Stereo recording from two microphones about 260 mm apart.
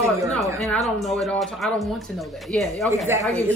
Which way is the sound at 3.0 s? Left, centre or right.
Centre.